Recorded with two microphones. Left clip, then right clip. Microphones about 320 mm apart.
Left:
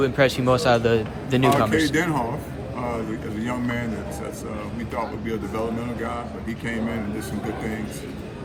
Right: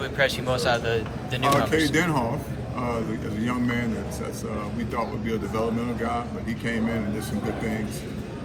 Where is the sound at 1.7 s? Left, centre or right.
Centre.